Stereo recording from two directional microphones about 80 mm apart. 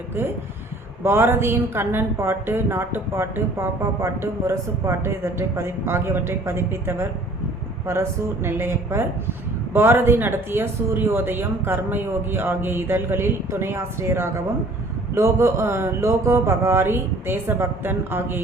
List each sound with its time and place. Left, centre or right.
0.2 s a woman's voice: right